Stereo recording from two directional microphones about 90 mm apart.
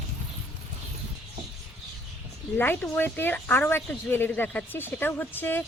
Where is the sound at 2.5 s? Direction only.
25° left (ahead or behind).